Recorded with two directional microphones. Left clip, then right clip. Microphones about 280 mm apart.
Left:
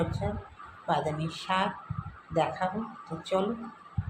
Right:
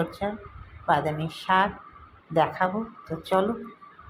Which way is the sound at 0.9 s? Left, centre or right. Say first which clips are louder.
Right 5 dB; centre.